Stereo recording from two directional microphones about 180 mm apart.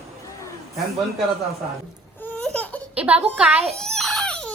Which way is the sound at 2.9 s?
5° right (ahead or behind).